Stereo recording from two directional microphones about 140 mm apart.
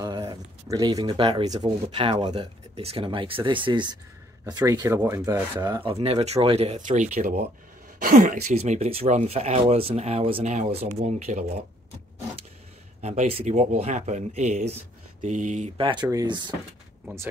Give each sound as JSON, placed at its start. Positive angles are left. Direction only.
{"t": 0.0, "sound": "speech", "side_deg": -30}
{"t": 2.7, "sound": "speech", "side_deg": -45}
{"t": 5.9, "sound": "speech", "side_deg": -45}
{"t": 6.9, "sound": "speech", "side_deg": -65}
{"t": 8.0, "sound": "speech", "side_deg": -80}
{"t": 8.5, "sound": "speech", "side_deg": -50}
{"t": 13.0, "sound": "speech", "side_deg": -55}
{"t": 15.2, "sound": "speech", "side_deg": -65}
{"t": 15.8, "sound": "speech", "side_deg": -35}